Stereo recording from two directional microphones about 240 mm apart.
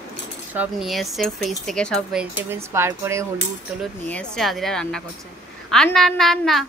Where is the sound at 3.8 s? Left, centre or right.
Centre.